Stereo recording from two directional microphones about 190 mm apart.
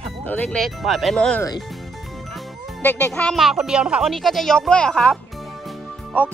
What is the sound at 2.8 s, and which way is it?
A child's voice, 10° left (ahead or behind).